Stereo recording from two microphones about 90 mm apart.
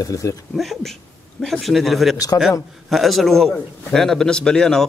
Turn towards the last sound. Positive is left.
turn(degrees=5)  # may be behind; listen again after turning